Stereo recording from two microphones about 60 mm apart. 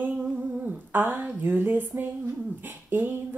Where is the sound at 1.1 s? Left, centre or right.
Right.